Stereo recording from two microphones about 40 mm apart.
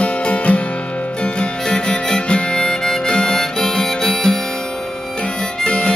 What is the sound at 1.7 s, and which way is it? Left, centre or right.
Harmonica, left.